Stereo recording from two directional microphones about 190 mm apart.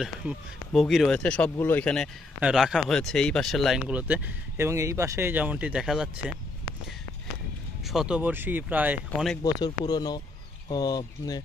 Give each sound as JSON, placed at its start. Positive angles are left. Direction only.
{"t": 0.0, "sound": "speech", "side_deg": -5}
{"t": 7.8, "sound": "speech", "side_deg": 0}
{"t": 9.4, "sound": "speech", "side_deg": 20}